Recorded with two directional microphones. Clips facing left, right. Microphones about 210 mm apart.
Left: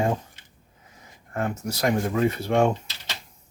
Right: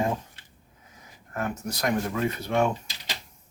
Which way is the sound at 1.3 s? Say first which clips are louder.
Left 3 dB; 30° left (ahead or behind).